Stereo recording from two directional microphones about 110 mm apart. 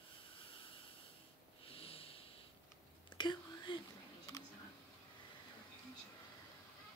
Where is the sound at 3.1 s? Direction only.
45° left (ahead or behind).